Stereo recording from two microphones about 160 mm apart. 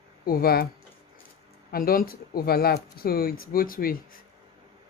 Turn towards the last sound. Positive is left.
turn(degrees=65)  # may be behind; listen again after turning